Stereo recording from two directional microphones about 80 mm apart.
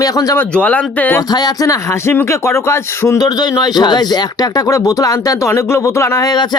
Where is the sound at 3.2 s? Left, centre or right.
Left.